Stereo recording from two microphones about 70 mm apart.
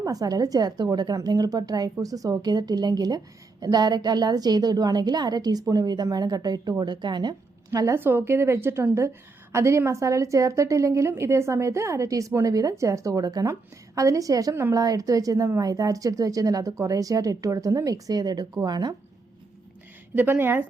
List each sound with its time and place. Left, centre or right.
0.0 s a woman's voice: right
7.7 s a woman's voice: right
7.9 s a woman's voice: right
13.5 s a woman's voice: right
20.1 s speech: right